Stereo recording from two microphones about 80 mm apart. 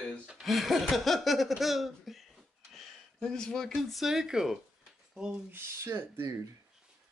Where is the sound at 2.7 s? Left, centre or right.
Centre.